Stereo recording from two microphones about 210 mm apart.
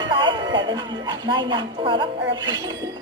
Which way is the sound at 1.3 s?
20° right (ahead or behind).